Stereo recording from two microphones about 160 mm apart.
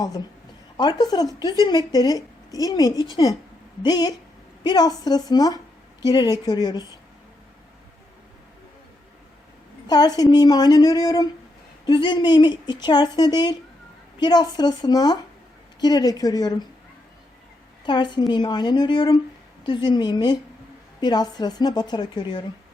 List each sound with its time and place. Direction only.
0.8 s speech: 25° left (ahead or behind)
9.8 s a woman's voice: 25° left (ahead or behind)
17.8 s speech: 30° left (ahead or behind)